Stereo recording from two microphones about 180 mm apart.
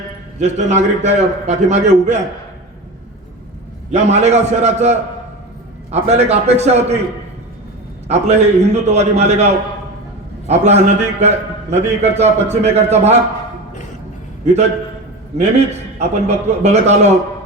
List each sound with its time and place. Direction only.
0.3 s a man's voice: 40° right (ahead or behind)
3.9 s a man's voice: 40° right (ahead or behind)
8.0 s a man's voice: 35° right (ahead or behind)
14.4 s a man's voice: 40° right (ahead or behind)